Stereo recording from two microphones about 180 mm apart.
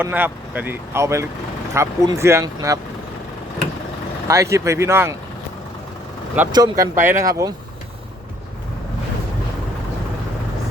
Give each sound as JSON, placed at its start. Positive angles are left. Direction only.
{"t": 0.0, "sound": "speech", "side_deg": -10}
{"t": 4.3, "sound": "speech", "side_deg": -15}
{"t": 6.5, "sound": "speech", "side_deg": -20}